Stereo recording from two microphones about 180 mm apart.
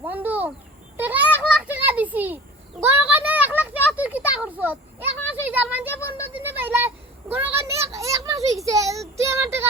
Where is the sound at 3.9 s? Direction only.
5° right (ahead or behind).